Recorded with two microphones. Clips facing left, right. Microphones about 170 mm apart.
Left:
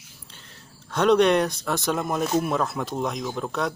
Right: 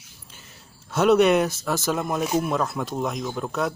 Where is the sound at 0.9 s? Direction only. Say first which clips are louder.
Right 1 dB; 5° right (ahead or behind).